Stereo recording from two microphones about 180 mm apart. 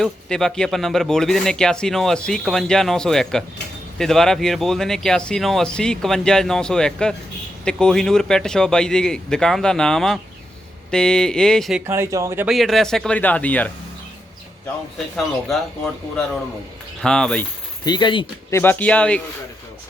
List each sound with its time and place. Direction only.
0.0 s speech: centre (ahead or behind)
11.9 s speech: 15° right (ahead or behind)
12.5 s speech: centre (ahead or behind)
14.9 s speech: centre (ahead or behind)
17.8 s speech: 25° left (ahead or behind)
18.5 s speech: 10° left (ahead or behind)